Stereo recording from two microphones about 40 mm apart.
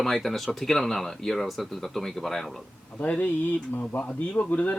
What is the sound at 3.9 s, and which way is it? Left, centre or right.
Speech, left.